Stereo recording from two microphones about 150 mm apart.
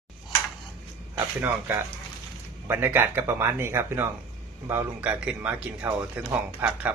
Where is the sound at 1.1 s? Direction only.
15° right (ahead or behind).